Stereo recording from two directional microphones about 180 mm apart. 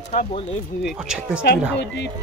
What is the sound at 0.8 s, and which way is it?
Speech, centre (ahead or behind).